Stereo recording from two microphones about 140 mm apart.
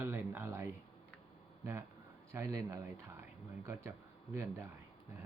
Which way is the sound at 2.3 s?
20° right (ahead or behind).